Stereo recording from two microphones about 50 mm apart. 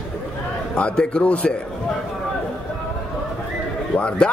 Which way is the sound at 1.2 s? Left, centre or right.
Left.